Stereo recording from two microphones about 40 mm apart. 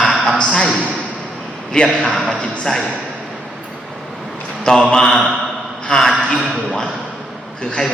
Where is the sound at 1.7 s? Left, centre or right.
Centre.